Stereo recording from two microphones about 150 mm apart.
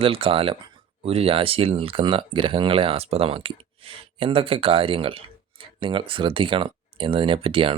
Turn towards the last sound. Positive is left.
turn(degrees=-40)  # may be behind; listen again after turning